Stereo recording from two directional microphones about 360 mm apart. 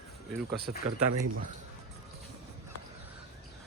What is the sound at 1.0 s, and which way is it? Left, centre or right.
Speech, right.